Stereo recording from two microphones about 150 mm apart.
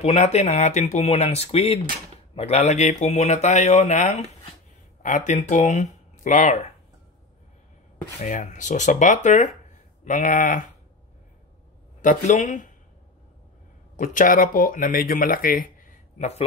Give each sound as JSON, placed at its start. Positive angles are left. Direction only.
{"t": 0.0, "sound": "speech", "side_deg": 45}
{"t": 8.2, "sound": "speech", "side_deg": 55}
{"t": 12.0, "sound": "speech", "side_deg": 60}
{"t": 13.9, "sound": "speech", "side_deg": 60}